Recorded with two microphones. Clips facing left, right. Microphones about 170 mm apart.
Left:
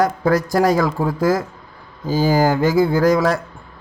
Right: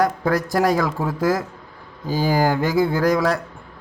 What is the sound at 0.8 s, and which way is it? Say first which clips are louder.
Speech: left 4 dB; 30° left (ahead or behind).